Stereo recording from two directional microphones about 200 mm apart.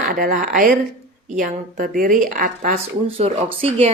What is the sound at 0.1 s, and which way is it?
A woman's voice, 40° right (ahead or behind).